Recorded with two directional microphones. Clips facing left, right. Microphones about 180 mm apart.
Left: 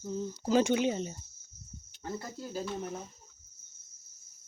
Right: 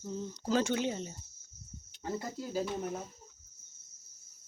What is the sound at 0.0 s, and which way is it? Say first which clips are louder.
Speech: left 3 dB; 5° left (ahead or behind).